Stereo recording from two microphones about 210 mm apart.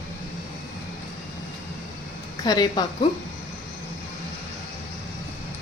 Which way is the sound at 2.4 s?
20° left (ahead or behind).